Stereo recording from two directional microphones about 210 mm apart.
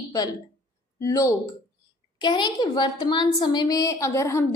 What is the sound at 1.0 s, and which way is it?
A woman's voice, 15° left (ahead or behind).